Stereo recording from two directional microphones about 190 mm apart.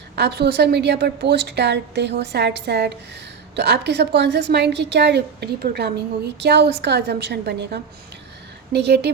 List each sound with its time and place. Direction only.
0.2 s a woman's voice: 60° right (ahead or behind)